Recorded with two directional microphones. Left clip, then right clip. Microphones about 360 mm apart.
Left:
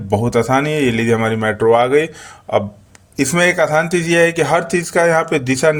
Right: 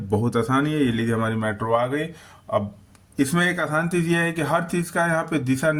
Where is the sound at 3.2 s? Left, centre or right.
Right.